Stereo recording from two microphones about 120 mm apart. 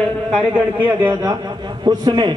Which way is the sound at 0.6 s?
15° right (ahead or behind).